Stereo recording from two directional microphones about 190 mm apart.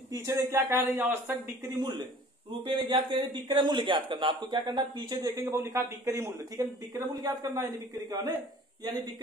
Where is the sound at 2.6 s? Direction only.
25° right (ahead or behind).